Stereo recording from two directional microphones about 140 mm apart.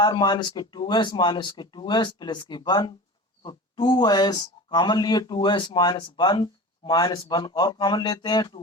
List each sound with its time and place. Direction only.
0.0 s speech: 30° left (ahead or behind)